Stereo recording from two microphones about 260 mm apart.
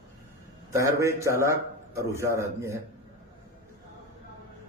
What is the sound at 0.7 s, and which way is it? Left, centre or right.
A man's voice, centre.